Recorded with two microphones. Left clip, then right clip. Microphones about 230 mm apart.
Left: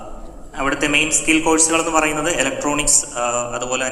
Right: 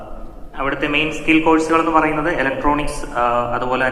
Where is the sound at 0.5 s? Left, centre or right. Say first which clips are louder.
Left 1 dB; left.